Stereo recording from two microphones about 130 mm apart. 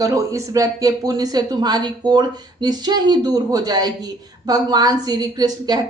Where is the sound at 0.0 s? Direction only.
25° right (ahead or behind).